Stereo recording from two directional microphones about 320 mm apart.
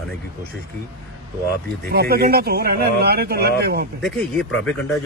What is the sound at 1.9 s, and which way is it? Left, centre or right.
Speech, right.